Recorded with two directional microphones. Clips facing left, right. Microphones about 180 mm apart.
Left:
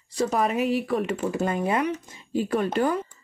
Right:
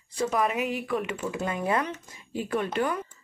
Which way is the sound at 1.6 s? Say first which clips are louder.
Left 3 dB; 20° left (ahead or behind).